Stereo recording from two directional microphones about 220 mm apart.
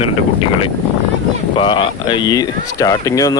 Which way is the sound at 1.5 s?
25° left (ahead or behind).